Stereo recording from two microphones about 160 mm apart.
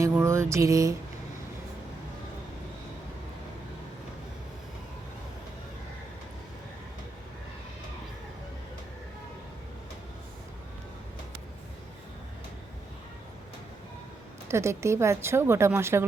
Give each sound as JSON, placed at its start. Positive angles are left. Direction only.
{"t": 0.0, "sound": "mantra", "side_deg": -15}
{"t": 14.4, "sound": "speech", "side_deg": -15}